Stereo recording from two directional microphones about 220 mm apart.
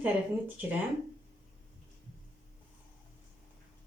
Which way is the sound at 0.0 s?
5° right (ahead or behind).